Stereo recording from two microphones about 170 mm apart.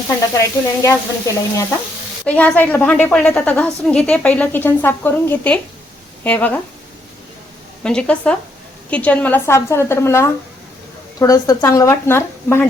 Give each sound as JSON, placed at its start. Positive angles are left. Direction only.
{"t": 0.1, "sound": "sizzle", "side_deg": 20}
{"t": 2.2, "sound": "a woman's voice", "side_deg": 10}
{"t": 7.9, "sound": "a woman's voice", "side_deg": 5}